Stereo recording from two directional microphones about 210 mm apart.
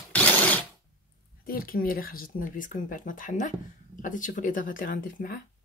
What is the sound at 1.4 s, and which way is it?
Speech, 45° left (ahead or behind).